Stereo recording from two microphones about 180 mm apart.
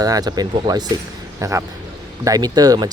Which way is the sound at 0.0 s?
20° right (ahead or behind).